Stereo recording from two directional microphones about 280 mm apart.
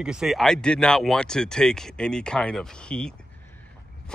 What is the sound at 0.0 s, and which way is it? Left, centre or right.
Speech, centre.